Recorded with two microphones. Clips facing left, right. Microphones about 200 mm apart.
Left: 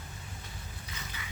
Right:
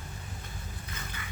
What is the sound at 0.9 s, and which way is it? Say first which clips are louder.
Boat: right 2 dB; 50° right (ahead or behind).